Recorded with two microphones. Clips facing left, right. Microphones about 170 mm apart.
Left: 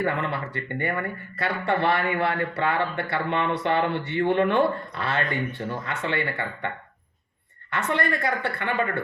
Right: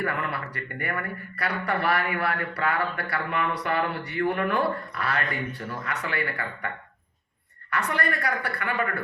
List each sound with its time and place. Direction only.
0.0 s speech: 25° left (ahead or behind)
7.7 s speech: 25° left (ahead or behind)